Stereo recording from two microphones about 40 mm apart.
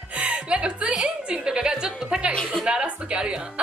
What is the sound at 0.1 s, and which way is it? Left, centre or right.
Music, right.